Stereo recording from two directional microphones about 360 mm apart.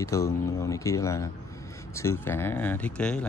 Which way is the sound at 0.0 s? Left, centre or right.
Centre.